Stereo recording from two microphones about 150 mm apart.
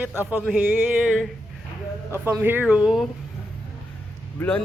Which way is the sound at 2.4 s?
10° right (ahead or behind).